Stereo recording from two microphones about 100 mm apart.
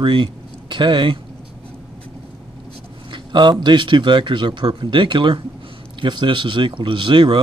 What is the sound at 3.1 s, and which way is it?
Speech, 50° right (ahead or behind).